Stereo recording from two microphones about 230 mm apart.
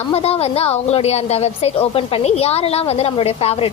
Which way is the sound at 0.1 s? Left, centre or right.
Left.